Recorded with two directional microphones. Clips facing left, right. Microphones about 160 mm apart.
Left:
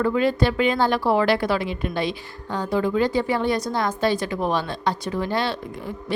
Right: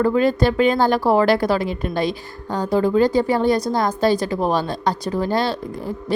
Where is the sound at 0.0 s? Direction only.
40° right (ahead or behind).